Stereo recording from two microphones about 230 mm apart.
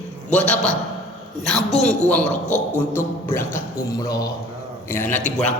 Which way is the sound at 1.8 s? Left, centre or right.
Centre.